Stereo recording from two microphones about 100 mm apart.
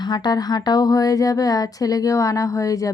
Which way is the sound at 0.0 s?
45° left (ahead or behind).